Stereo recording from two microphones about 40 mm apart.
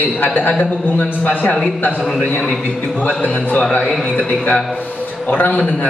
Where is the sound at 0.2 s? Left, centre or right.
Left.